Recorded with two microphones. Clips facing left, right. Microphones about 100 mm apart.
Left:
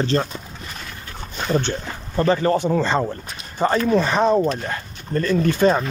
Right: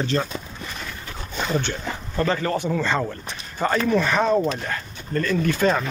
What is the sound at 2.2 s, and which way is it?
Speech, 25° left (ahead or behind).